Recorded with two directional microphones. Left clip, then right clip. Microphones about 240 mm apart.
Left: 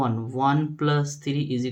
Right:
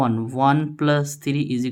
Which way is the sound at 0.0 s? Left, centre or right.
Right.